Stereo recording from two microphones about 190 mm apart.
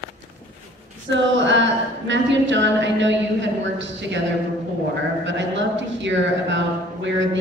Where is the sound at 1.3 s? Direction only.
70° right (ahead or behind).